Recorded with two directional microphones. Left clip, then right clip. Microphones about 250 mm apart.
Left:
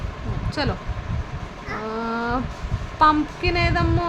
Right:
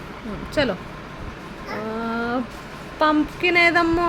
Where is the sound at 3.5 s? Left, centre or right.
Centre.